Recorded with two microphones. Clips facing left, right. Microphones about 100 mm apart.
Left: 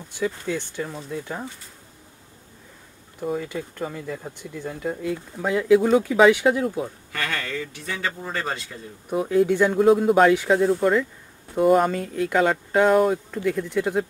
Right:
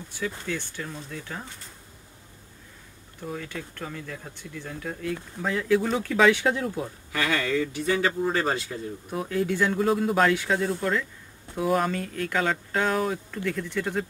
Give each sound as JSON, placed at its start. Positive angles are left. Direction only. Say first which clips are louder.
{"t": 0.1, "sound": "speech", "louder": "left 5 dB", "side_deg": 15}
{"t": 3.2, "sound": "speech", "louder": "left 7 dB", "side_deg": 15}
{"t": 7.1, "sound": "speech", "louder": "right 3 dB", "side_deg": -5}